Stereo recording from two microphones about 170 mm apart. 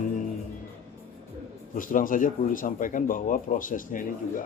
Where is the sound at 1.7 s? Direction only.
50° left (ahead or behind).